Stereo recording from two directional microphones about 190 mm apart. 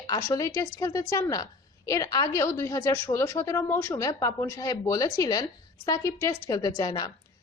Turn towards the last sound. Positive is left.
turn(degrees=20)  # may be behind; listen again after turning